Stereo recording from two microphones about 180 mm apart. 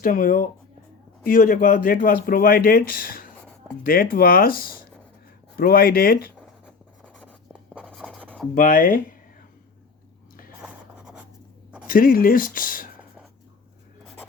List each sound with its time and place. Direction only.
0.0 s speech: 50° left (ahead or behind)
7.8 s writing: 5° left (ahead or behind)
8.5 s speech: 45° left (ahead or behind)
10.6 s writing: 5° right (ahead or behind)
11.9 s speech: 50° left (ahead or behind)